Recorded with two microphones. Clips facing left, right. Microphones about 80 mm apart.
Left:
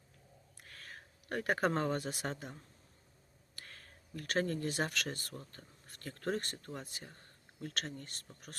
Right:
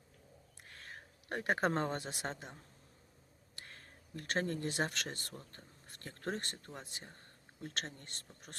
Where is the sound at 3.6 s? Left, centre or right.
Right.